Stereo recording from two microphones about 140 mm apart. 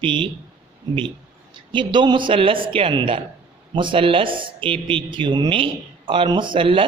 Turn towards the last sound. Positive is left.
turn(degrees=-40)  # may be behind; listen again after turning